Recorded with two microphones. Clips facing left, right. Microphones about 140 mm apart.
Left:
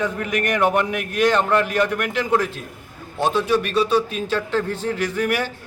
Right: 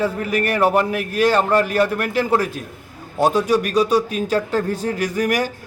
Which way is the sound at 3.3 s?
10° right (ahead or behind).